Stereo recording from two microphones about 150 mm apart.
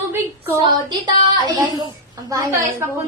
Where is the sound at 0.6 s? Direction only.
30° right (ahead or behind).